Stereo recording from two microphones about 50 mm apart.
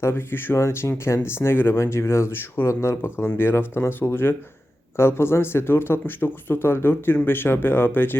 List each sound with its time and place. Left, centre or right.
0.0 s speech: left
0.5 s speech: left
3.2 s speech: left